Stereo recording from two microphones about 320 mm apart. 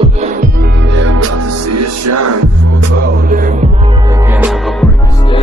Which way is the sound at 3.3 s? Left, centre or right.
Right.